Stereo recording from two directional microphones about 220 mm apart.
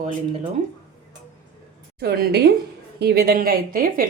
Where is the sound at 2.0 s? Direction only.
45° right (ahead or behind).